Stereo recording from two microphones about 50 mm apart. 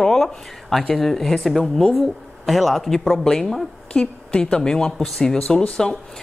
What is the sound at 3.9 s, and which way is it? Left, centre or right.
Speech, left.